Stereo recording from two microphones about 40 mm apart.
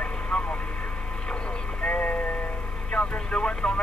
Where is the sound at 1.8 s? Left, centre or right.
Left.